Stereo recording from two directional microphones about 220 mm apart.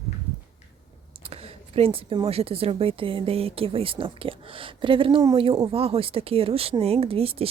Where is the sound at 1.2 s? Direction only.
25° right (ahead or behind).